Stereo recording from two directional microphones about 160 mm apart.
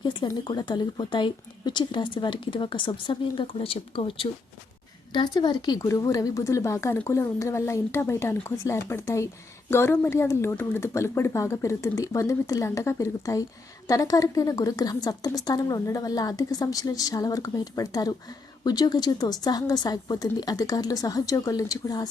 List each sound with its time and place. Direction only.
0.0 s a woman's voice: 30° left (ahead or behind)